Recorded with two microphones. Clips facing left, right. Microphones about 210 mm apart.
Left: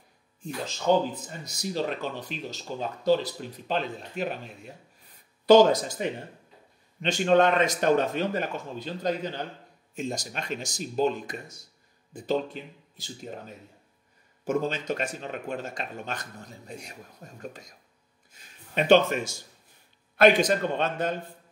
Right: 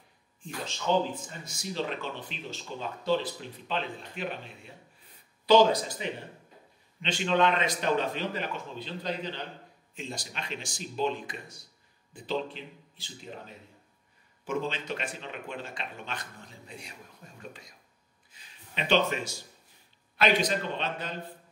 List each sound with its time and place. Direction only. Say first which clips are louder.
0.4 s speech: left 4 dB; 40° left (ahead or behind)
18.3 s a sound: left 10 dB; 45° left (ahead or behind)
20.2 s speech: left 7 dB; 50° left (ahead or behind)